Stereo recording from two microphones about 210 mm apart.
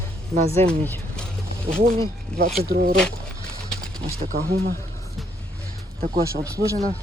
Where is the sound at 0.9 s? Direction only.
5° left (ahead or behind).